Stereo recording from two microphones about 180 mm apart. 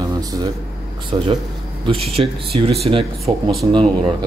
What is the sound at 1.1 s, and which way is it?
Speech, 30° right (ahead or behind).